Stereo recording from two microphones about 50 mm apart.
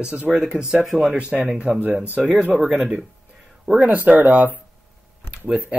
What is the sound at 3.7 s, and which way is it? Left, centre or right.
Speech, right.